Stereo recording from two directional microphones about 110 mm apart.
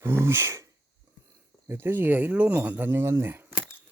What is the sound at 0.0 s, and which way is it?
Speech, 25° right (ahead or behind).